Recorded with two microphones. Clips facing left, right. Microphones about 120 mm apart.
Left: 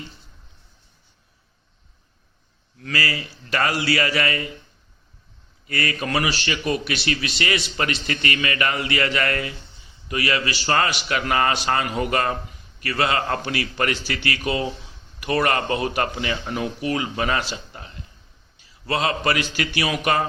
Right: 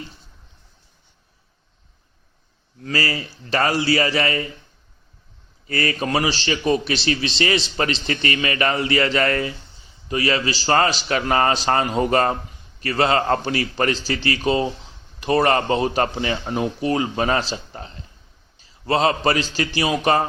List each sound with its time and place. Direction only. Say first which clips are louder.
2.8 s a man's voice: right 2 dB; 30° right (ahead or behind)
5.6 s a man's voice: right 3 dB; 30° right (ahead or behind)